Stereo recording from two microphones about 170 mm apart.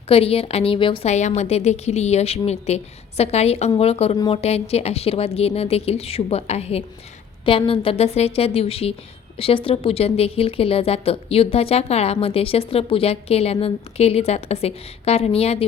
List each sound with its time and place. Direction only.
0.1 s speech: 35° left (ahead or behind)